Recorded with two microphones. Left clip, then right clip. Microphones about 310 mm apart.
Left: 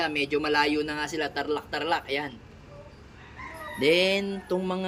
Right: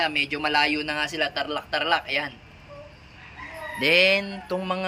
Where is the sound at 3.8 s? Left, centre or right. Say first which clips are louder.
Right 4 dB; centre.